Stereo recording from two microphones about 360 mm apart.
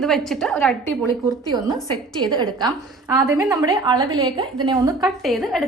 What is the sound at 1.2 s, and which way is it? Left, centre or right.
A woman's voice, centre.